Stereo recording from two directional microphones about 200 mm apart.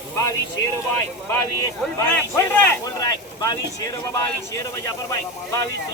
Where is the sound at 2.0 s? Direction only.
15° left (ahead or behind).